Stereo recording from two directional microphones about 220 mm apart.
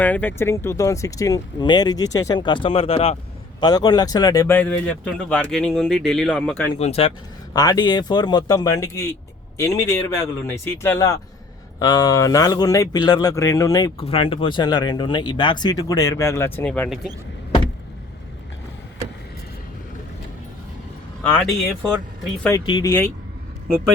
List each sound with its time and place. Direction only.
0.0 s speech: 10° left (ahead or behind)
6.7 s speech: 30° left (ahead or behind)
7.5 s speech: 15° left (ahead or behind)
22.4 s speech: 20° left (ahead or behind)